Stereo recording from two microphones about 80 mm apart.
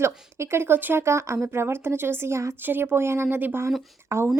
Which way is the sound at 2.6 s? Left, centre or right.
Right.